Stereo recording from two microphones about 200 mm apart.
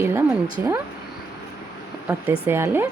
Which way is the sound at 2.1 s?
10° right (ahead or behind).